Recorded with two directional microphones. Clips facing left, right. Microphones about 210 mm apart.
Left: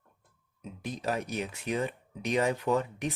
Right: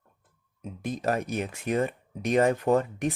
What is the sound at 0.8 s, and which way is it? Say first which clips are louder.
Speech: right 5 dB; 50° right (ahead or behind).